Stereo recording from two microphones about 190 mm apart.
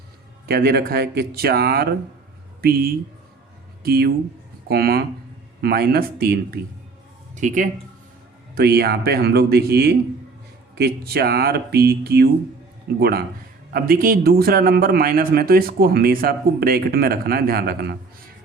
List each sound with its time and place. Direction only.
0.4 s a man's voice: 55° right (ahead or behind)
7.3 s speech: 40° right (ahead or behind)
8.5 s a man's voice: 55° right (ahead or behind)